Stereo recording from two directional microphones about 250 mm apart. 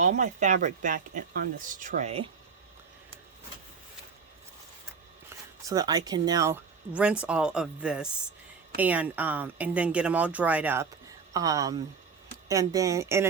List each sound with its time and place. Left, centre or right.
0.0 s speech: right
5.6 s a woman's voice: centre